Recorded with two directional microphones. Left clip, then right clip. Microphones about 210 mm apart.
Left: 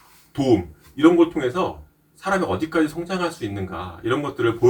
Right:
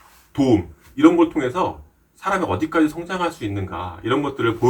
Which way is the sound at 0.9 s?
5° right (ahead or behind).